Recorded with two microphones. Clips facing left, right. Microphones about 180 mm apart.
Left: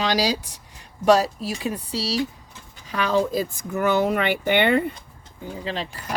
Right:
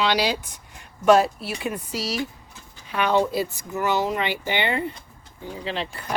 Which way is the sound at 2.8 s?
45° left (ahead or behind).